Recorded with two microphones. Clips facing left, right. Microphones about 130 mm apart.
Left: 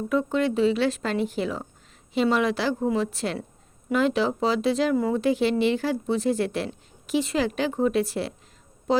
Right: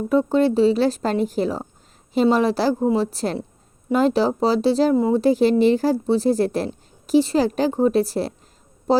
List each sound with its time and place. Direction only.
0.1 s speech: 35° right (ahead or behind)